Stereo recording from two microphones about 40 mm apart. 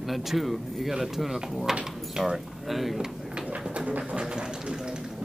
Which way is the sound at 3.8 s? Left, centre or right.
Right.